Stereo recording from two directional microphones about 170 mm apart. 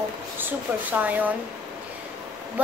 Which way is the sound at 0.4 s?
10° right (ahead or behind).